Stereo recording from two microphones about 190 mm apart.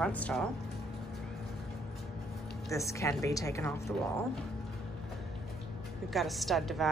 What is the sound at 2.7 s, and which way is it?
A woman's voice, 15° left (ahead or behind).